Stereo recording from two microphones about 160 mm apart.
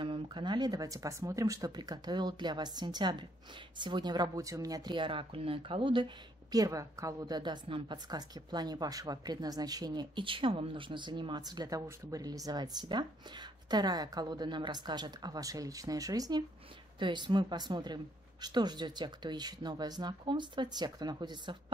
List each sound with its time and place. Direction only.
0.0 s speech: 30° right (ahead or behind)